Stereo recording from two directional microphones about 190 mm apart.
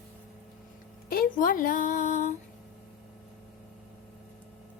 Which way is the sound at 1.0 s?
50° left (ahead or behind).